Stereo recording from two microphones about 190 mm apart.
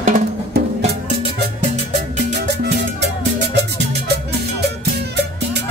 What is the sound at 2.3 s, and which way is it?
Music, 60° right (ahead or behind).